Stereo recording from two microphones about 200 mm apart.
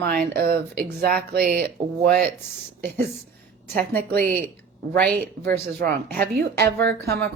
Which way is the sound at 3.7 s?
45° right (ahead or behind).